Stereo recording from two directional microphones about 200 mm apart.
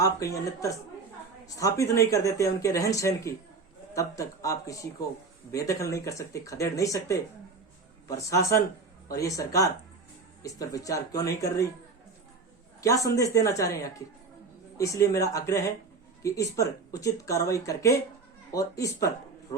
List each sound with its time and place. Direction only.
0.0 s speech: 15° left (ahead or behind)
12.8 s speech: 15° left (ahead or behind)